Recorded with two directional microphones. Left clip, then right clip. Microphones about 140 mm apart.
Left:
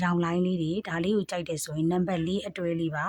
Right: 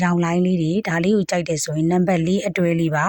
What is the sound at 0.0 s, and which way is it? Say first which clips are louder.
A woman's voice: right 7 dB; 40° right (ahead or behind).